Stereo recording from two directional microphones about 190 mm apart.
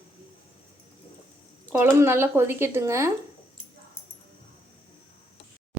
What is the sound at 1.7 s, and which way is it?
Speech, 10° right (ahead or behind).